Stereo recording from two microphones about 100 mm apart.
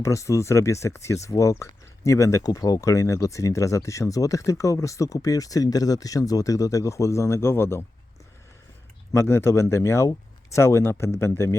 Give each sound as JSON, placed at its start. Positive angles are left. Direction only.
{"t": 0.0, "sound": "speech", "side_deg": 30}
{"t": 9.1, "sound": "speech", "side_deg": 25}